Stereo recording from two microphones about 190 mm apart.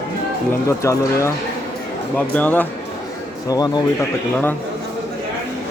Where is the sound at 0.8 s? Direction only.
15° left (ahead or behind).